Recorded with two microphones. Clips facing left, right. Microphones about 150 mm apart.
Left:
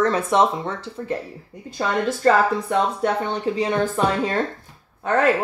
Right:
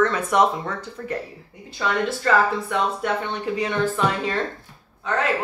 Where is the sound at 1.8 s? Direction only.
40° left (ahead or behind).